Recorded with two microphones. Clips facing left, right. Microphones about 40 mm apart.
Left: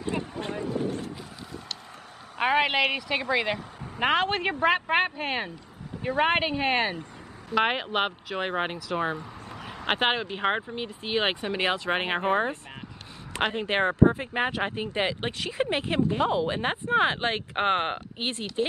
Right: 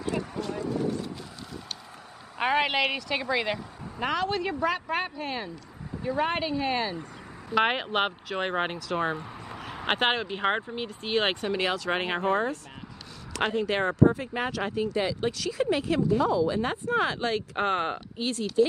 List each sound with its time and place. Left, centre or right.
0.0 s a sound: left
0.8 s a sound: left
2.3 s a woman's voice: centre
4.0 s speech: left
7.5 s speech: centre
11.5 s speech: left